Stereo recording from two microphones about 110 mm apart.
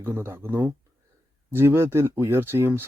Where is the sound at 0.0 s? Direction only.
20° right (ahead or behind).